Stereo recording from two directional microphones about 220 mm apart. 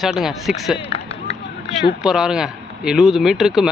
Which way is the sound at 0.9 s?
30° left (ahead or behind).